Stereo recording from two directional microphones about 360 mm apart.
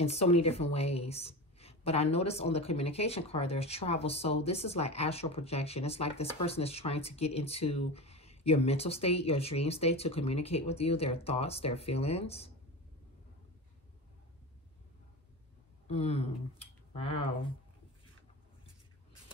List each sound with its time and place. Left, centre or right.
0.0 s a woman's voice: centre
15.9 s a woman's voice: centre